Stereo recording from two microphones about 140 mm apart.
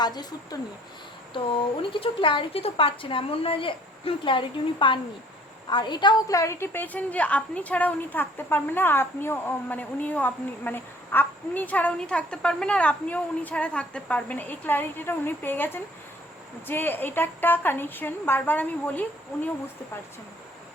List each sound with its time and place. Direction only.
0.0 s speech: 30° left (ahead or behind)
1.8 s a woman's voice: 40° left (ahead or behind); by 19.0 s 10° left (ahead or behind)